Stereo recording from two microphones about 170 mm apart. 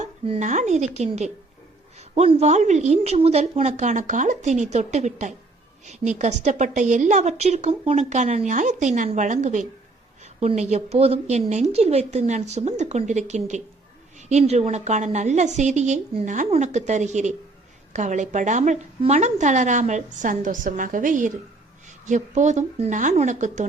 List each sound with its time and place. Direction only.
0.0 s a woman's voice: 45° right (ahead or behind)